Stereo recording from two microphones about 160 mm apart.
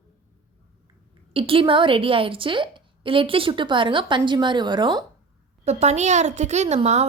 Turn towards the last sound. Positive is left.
turn(degrees=-45)  # may be behind; listen again after turning